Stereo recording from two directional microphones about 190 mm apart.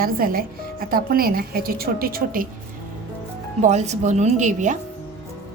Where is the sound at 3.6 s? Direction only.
35° right (ahead or behind).